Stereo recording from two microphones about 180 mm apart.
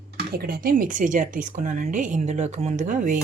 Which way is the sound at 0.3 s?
55° right (ahead or behind).